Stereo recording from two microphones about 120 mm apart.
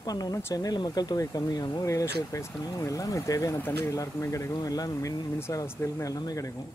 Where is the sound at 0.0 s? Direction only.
30° left (ahead or behind).